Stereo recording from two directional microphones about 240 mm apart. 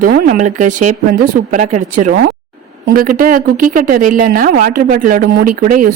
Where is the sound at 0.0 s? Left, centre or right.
Right.